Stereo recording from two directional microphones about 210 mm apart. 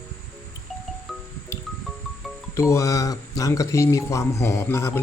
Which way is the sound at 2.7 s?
15° left (ahead or behind).